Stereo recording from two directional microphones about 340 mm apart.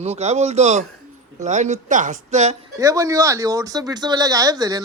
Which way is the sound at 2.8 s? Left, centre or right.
Centre.